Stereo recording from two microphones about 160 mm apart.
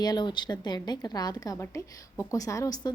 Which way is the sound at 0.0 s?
25° left (ahead or behind).